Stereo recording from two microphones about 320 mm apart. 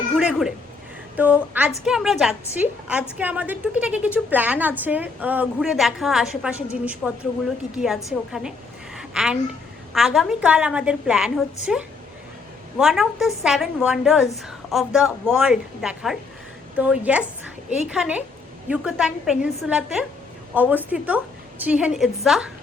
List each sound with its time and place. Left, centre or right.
0.2 s a woman's voice: centre
9.0 s a sound: centre
9.9 s a woman's voice: centre